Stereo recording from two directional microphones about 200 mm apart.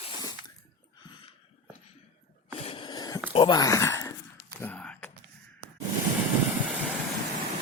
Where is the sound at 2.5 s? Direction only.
30° left (ahead or behind).